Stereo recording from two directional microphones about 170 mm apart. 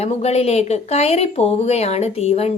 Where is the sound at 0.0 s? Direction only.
40° left (ahead or behind).